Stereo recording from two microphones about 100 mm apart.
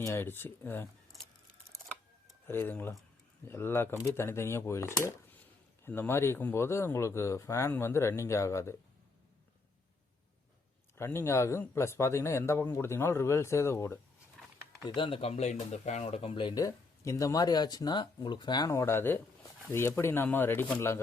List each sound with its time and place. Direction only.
0.0 s speech: 25° left (ahead or behind)
2.5 s speech: 20° left (ahead or behind)
10.9 s speech: 25° left (ahead or behind)
14.8 s speech: 60° left (ahead or behind)
16.6 s speech: 35° left (ahead or behind)
18.7 s speech: 25° left (ahead or behind)